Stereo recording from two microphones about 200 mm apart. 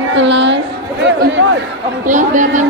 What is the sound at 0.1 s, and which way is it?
Speech, 65° right (ahead or behind).